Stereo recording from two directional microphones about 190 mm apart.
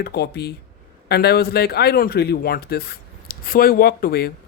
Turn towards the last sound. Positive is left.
turn(degrees=50)  # may be behind; listen again after turning